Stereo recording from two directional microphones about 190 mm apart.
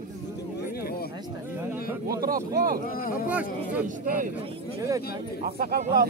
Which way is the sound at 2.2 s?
50° right (ahead or behind).